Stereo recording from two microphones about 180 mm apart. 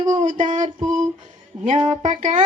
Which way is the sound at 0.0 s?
40° right (ahead or behind).